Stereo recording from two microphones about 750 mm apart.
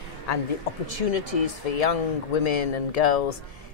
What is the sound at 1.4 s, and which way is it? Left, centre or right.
Speech, left.